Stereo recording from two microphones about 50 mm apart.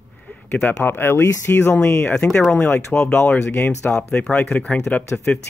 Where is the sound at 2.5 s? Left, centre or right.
Left.